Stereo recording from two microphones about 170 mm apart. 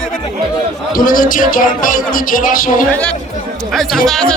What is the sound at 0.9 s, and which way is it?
Speech, 55° left (ahead or behind).